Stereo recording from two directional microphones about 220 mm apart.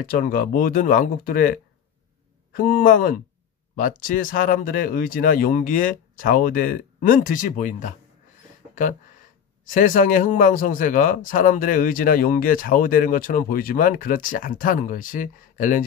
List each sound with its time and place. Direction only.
0.0 s speech: 40° left (ahead or behind)
9.7 s speech: 35° left (ahead or behind)